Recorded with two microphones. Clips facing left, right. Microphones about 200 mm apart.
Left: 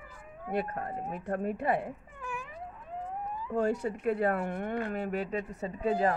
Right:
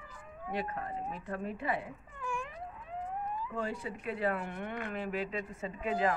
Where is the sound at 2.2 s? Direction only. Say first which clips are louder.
Right 4 dB; 5° left (ahead or behind).